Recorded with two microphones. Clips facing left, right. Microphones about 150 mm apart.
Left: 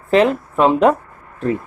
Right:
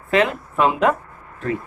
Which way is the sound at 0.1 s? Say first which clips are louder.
Left 5 dB; 35° left (ahead or behind).